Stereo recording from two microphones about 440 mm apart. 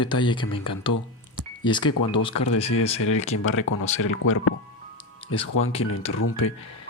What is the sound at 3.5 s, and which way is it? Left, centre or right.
Speech, left.